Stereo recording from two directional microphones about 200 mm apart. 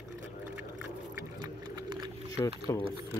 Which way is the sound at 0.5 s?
10° right (ahead or behind).